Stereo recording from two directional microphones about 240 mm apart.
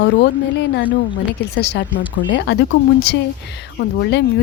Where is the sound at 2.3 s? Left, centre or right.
Left.